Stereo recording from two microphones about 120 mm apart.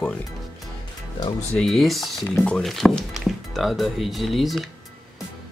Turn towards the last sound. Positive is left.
turn(degrees=0)  # may be behind; listen again after turning